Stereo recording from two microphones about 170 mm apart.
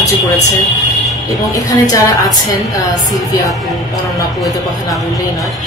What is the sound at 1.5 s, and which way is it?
Speech, 20° left (ahead or behind).